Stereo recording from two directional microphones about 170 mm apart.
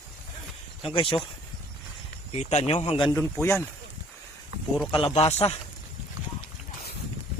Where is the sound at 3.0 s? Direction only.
20° left (ahead or behind).